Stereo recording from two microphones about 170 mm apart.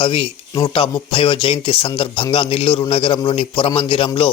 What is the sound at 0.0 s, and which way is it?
Speech, 30° left (ahead or behind).